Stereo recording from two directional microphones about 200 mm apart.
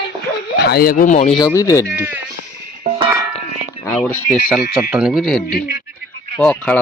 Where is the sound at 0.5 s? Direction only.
50° left (ahead or behind); by 1.3 s 35° left (ahead or behind).